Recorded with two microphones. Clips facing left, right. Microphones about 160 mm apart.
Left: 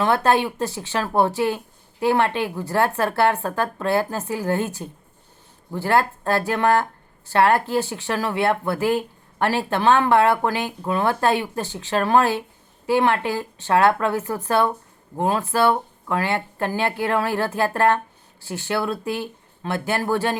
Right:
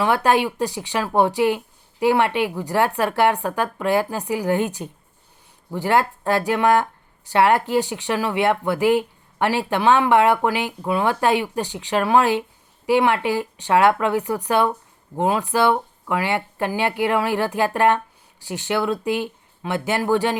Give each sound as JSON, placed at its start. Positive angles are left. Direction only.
{"t": 0.0, "sound": "speech", "side_deg": -15}